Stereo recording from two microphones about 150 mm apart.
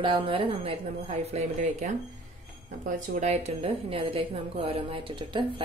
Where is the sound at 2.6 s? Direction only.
55° right (ahead or behind).